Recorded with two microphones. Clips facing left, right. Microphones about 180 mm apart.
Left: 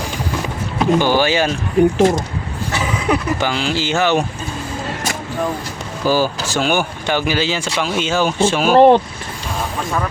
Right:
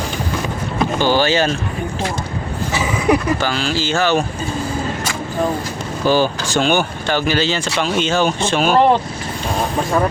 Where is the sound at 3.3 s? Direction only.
15° left (ahead or behind).